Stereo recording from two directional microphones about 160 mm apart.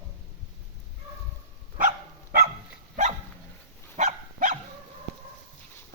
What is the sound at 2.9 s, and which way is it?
Dog, 50° right (ahead or behind).